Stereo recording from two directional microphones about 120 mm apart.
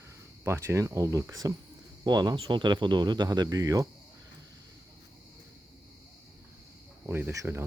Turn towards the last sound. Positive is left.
turn(degrees=-25)  # may be behind; listen again after turning